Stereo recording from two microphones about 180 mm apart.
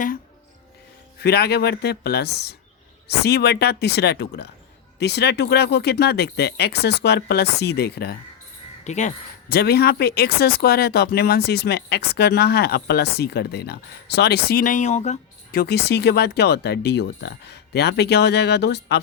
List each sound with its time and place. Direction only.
1.2 s speech: 65° left (ahead or behind)
8.8 s speech: 40° left (ahead or behind)
9.5 s speech: 60° left (ahead or behind); by 15.6 s 40° left (ahead or behind)
15.6 s speech: 65° left (ahead or behind)